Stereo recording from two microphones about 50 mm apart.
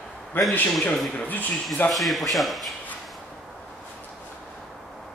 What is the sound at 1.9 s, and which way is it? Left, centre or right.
Speech, centre.